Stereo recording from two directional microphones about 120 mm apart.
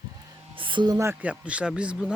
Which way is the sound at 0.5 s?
45° right (ahead or behind).